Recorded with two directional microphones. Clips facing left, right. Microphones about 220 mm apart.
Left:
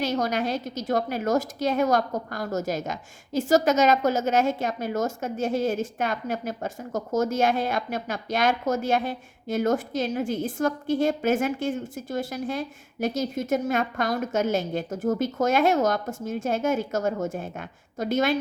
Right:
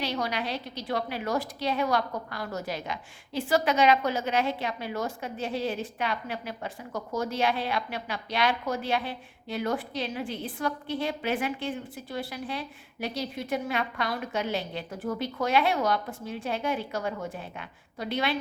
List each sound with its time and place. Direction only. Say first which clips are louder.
0.0 s a woman's voice: left 5 dB; 45° left (ahead or behind)